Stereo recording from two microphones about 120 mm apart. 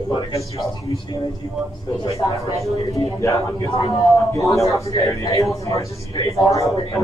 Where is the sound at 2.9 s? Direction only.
25° left (ahead or behind).